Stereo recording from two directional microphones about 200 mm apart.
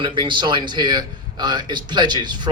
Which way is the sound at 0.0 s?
25° right (ahead or behind).